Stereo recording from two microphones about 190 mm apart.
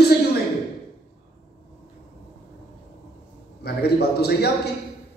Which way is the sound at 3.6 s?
60° left (ahead or behind).